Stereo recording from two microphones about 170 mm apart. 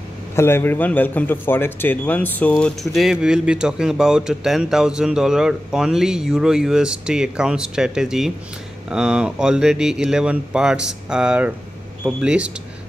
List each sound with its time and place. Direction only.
0.4 s speech: 15° left (ahead or behind); by 12.5 s 5° right (ahead or behind)